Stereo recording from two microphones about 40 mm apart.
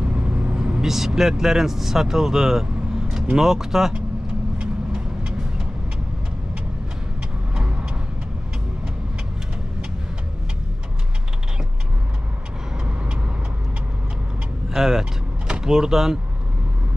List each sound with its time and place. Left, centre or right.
0.0 s vehicle: right
0.8 s speech: centre
4.6 s vehicle: right
12.8 s vehicle: right
14.7 s vehicle: centre
15.5 s speech: centre